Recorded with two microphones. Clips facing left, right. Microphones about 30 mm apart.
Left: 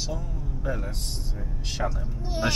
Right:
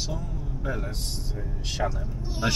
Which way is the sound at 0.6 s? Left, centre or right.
Centre.